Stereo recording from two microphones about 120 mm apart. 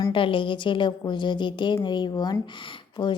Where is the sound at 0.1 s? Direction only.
45° left (ahead or behind).